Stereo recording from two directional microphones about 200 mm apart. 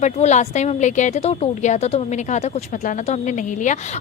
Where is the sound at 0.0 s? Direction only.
35° left (ahead or behind).